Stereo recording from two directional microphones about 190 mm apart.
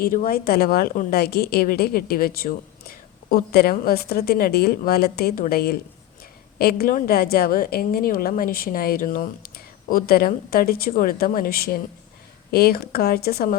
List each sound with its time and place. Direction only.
0.0 s a woman's voice: 50° left (ahead or behind)